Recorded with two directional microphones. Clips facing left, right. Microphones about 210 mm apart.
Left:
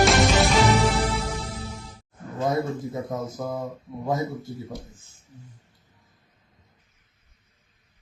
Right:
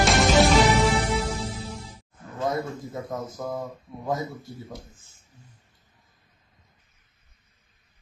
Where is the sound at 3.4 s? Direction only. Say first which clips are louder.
Even; centre (ahead or behind).